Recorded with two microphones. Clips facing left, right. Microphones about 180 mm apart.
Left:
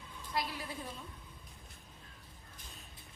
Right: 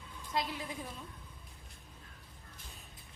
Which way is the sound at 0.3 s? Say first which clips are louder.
Right 2 dB; 20° right (ahead or behind).